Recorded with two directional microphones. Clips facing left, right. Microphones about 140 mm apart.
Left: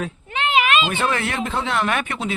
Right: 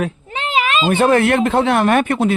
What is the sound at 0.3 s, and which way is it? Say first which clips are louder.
Speech: left 2 dB; 35° right (ahead or behind).